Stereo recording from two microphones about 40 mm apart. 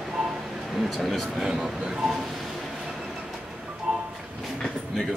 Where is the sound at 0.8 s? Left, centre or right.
Centre.